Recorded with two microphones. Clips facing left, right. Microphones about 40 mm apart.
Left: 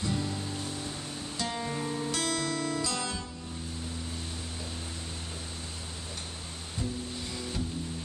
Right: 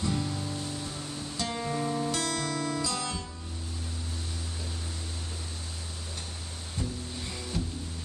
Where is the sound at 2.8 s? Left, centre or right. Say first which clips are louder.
Right 1 dB; centre.